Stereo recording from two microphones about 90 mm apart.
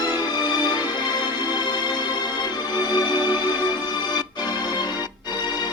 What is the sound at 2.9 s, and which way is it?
Music, 55° left (ahead or behind).